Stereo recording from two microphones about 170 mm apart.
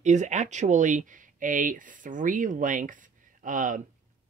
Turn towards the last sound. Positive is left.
turn(degrees=-50)  # may be behind; listen again after turning